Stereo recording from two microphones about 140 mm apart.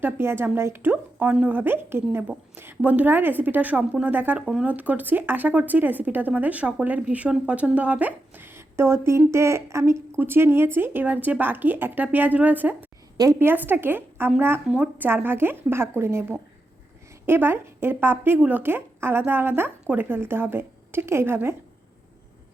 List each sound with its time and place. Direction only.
0.0 s speech: 15° right (ahead or behind)